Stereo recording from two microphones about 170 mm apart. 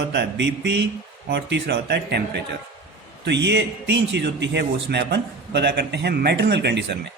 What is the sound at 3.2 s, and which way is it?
A man's voice, 90° right.